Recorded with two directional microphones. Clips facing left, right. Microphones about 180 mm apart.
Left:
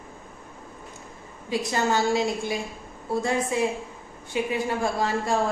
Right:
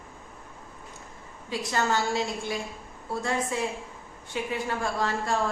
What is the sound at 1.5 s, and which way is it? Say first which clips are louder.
A woman's voice: left 3 dB; 15° left (ahead or behind).